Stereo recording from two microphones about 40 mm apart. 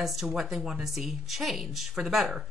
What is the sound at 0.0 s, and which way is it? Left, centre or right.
Speech, centre.